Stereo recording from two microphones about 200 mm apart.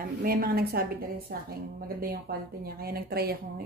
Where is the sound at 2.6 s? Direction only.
50° right (ahead or behind).